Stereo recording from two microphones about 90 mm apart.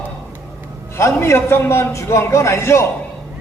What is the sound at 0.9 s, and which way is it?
A man's voice, 30° left (ahead or behind).